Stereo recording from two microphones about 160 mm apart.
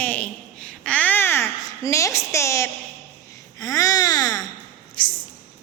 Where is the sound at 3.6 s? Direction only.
20° left (ahead or behind).